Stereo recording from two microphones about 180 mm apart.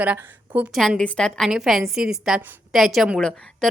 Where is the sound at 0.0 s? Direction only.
10° right (ahead or behind).